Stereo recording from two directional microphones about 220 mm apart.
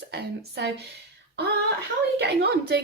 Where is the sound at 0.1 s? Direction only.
50° right (ahead or behind).